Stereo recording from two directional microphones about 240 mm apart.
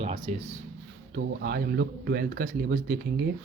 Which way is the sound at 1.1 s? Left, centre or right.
Right.